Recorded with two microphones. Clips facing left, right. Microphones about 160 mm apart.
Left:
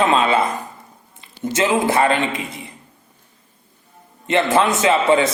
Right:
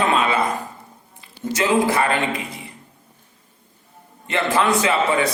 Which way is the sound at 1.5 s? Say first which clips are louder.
Left 1 dB; 25° left (ahead or behind).